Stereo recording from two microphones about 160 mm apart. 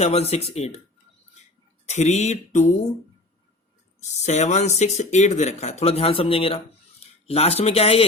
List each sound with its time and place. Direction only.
0.0 s speech: 40° left (ahead or behind)
1.9 s speech: 45° left (ahead or behind)
4.0 s speech: 45° left (ahead or behind)